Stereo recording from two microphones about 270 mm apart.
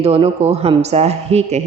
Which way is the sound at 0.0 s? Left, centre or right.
Right.